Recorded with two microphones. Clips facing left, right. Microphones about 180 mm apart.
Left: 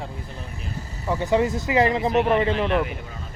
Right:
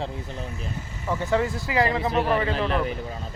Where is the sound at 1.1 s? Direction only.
15° left (ahead or behind).